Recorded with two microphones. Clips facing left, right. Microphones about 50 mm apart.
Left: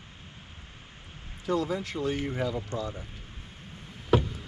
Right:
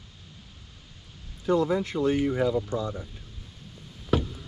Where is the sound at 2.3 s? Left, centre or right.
Centre.